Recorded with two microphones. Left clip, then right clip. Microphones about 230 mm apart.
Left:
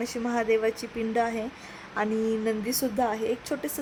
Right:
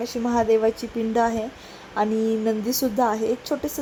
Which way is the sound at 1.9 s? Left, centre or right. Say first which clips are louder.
Right 5 dB; centre.